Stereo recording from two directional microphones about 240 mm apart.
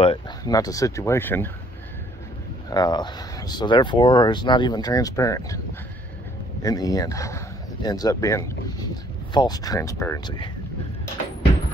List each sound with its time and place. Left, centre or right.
0.0 s a man's voice: centre
2.7 s a man's voice: centre
6.6 s a man's voice: centre